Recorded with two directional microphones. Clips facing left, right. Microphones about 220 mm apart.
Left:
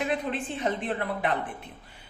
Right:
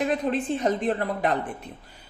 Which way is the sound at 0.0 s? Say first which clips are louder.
Right 4 dB; 40° right (ahead or behind).